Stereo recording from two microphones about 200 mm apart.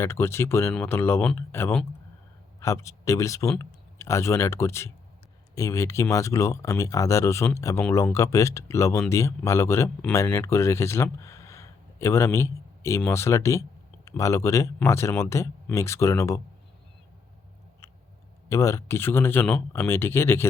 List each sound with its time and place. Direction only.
0.0 s speech: 10° left (ahead or behind)
18.4 s speech: 15° left (ahead or behind)